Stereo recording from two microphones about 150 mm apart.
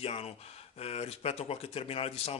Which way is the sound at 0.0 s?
40° left (ahead or behind).